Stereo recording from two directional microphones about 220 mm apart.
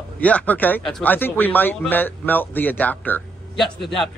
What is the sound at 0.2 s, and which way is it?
A man's voice, 5° left (ahead or behind).